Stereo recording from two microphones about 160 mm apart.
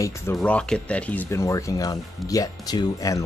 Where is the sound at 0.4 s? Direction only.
5° left (ahead or behind).